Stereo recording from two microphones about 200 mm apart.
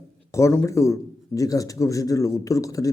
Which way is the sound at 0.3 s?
15° left (ahead or behind).